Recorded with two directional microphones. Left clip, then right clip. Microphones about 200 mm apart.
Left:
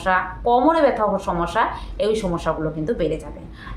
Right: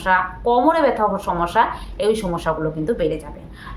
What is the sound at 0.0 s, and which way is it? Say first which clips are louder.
A woman's voice: right 2 dB; 5° right (ahead or behind).